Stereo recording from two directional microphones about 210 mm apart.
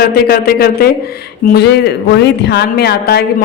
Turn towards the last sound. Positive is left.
turn(degrees=50)  # may be behind; listen again after turning